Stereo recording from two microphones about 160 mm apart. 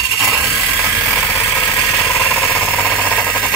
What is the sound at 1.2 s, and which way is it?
Vehicle, 10° left (ahead or behind).